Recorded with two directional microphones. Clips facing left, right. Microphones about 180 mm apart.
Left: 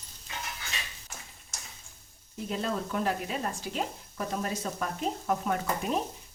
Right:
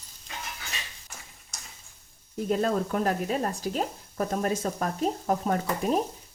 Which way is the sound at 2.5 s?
50° right (ahead or behind).